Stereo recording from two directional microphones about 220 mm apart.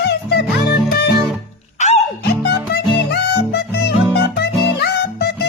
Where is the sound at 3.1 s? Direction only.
50° left (ahead or behind).